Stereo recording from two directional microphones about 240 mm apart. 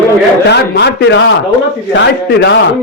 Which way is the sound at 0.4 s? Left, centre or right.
Left.